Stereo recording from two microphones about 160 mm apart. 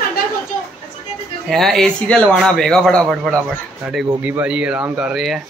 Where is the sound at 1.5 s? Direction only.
Centre (ahead or behind).